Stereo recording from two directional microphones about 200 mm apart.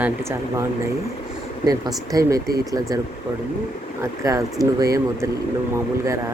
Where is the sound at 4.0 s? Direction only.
15° right (ahead or behind).